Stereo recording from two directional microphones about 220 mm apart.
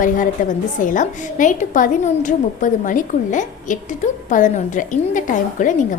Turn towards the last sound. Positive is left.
turn(degrees=35)  # may be behind; listen again after turning